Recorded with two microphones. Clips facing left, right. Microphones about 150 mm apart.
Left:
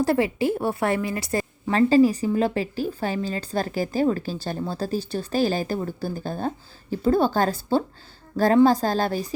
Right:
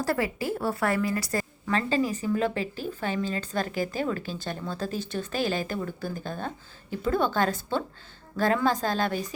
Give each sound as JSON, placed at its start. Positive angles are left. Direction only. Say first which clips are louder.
{"t": 0.0, "sound": "a woman's voice", "louder": "left 6 dB", "side_deg": 25}
{"t": 1.7, "sound": "a woman's voice", "louder": "left 9 dB", "side_deg": 35}